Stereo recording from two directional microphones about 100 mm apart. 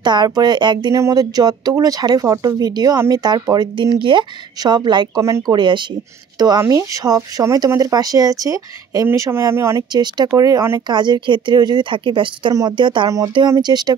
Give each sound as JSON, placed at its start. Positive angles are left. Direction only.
{"t": 0.0, "sound": "speech", "side_deg": -45}
{"t": 10.9, "sound": "speech", "side_deg": -50}